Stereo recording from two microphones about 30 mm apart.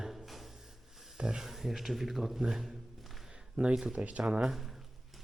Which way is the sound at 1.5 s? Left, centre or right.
Centre.